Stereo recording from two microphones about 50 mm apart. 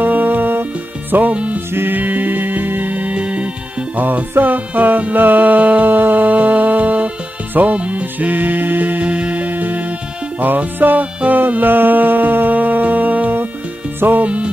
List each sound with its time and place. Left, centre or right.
0.0 s music: right
1.3 s music: right
1.7 s music: right
2.0 s music: right
3.9 s music: right
14.2 s music: right